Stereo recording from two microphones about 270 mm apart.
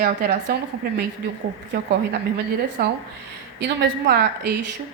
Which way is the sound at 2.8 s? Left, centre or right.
Right.